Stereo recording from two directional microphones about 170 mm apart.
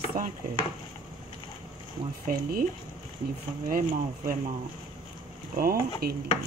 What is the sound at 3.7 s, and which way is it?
Speech, 55° right (ahead or behind).